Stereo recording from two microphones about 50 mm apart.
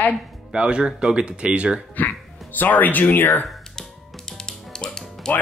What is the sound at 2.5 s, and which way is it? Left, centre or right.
Speech, left.